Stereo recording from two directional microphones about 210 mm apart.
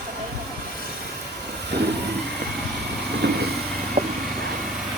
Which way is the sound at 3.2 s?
55° right (ahead or behind).